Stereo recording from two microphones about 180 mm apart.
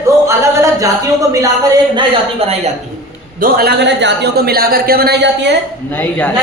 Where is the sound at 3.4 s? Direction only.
60° right (ahead or behind).